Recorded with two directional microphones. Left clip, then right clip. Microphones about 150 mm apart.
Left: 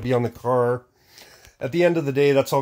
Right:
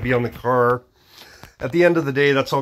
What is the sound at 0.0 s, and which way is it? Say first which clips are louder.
Speech: right 2 dB; 15° left (ahead or behind).